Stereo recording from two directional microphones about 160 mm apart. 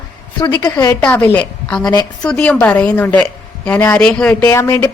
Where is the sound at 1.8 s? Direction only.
25° left (ahead or behind).